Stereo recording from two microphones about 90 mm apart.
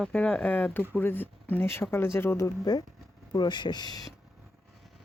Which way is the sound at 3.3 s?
55° left (ahead or behind).